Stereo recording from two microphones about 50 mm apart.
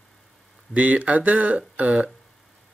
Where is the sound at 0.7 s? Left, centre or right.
Right.